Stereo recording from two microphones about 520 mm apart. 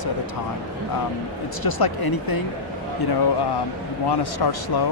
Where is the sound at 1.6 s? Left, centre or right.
Left.